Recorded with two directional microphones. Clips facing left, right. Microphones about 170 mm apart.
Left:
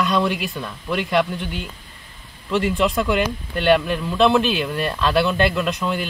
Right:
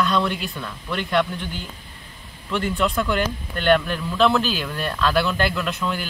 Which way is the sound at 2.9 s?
10° left (ahead or behind).